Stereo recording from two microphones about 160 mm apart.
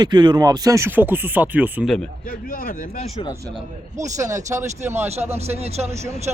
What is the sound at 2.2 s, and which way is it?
Speech, 60° left (ahead or behind).